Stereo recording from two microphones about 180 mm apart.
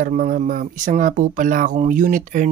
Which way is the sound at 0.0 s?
45° right (ahead or behind).